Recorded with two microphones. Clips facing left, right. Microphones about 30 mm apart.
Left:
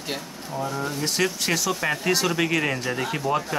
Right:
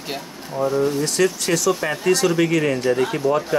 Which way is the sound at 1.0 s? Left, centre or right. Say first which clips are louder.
Right 4 dB; centre.